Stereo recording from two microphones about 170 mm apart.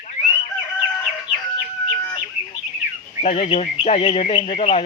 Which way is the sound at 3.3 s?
35° left (ahead or behind).